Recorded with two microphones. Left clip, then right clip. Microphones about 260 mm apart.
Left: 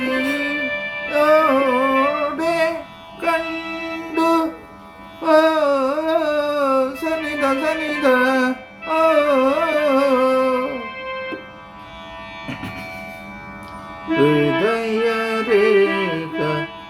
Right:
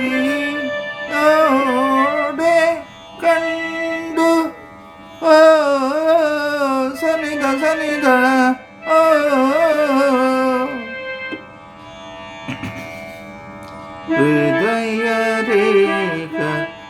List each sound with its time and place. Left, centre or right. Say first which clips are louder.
0.0 s music: right 2 dB; centre
5.2 s a sound: right 5 dB; right
14.3 s music: right 1 dB; right